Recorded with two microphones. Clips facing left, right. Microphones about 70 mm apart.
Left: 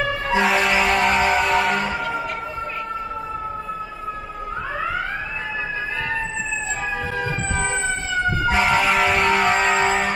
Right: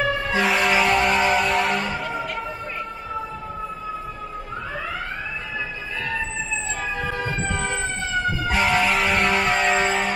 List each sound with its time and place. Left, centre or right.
0.4 s music: centre
7.5 s emergency vehicle: left
8.5 s vehicle: centre